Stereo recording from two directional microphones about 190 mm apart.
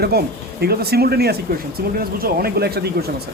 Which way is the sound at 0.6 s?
55° right (ahead or behind).